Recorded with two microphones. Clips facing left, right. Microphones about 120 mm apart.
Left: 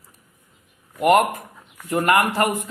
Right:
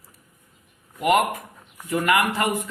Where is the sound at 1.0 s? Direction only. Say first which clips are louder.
Left 4 dB; 50° left (ahead or behind).